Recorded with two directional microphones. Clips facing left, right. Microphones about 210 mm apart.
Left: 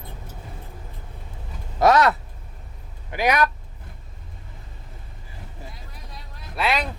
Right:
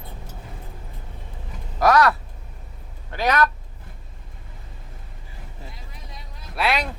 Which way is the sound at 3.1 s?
10° left (ahead or behind).